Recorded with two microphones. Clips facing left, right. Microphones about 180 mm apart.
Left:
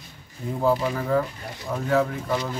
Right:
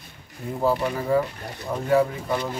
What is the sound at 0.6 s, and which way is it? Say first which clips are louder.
Speech: even; 5° right (ahead or behind).